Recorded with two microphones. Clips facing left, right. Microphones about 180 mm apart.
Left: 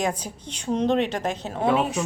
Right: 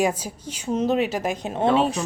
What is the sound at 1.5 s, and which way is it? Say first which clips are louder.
Speech: right 2 dB; 25° right (ahead or behind).